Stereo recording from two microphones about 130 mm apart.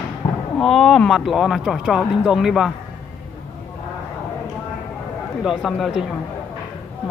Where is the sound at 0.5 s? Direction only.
5° left (ahead or behind).